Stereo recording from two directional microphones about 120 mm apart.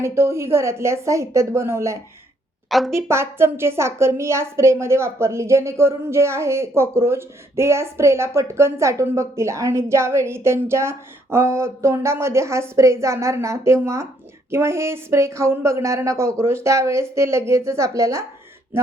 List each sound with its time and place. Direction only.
0.0 s a woman's voice: 20° right (ahead or behind)
2.6 s a woman's voice: centre (ahead or behind)
2.9 s a woman's voice: 20° right (ahead or behind)